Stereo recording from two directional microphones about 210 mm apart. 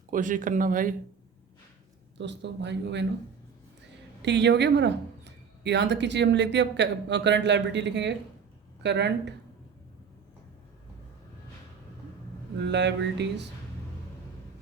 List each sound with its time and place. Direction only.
0.1 s speech: 40° right (ahead or behind)
2.1 s speech: 55° right (ahead or behind)
4.2 s speech: 55° right (ahead or behind)
12.6 s speech: 55° right (ahead or behind)